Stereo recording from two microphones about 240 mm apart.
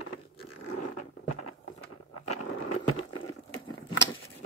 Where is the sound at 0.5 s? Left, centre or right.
Left.